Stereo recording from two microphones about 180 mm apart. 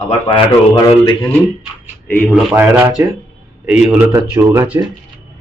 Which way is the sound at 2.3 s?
10° right (ahead or behind).